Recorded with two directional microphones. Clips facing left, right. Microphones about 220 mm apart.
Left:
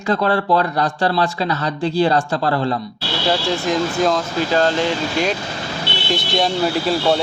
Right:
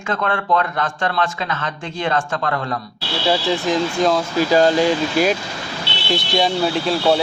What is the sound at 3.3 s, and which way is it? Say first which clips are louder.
Speech: right 1 dB; centre (ahead or behind).